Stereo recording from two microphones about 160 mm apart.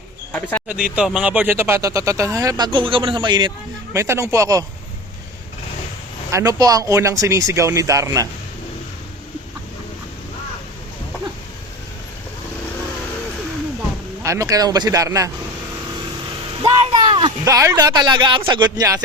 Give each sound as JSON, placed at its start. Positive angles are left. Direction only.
{"t": 0.7, "sound": "speech", "side_deg": -5}
{"t": 3.9, "sound": "speech", "side_deg": -20}
{"t": 6.3, "sound": "speech", "side_deg": -20}
{"t": 14.2, "sound": "speech", "side_deg": -20}
{"t": 16.8, "sound": "a sound", "side_deg": -35}
{"t": 17.4, "sound": "speech", "side_deg": -20}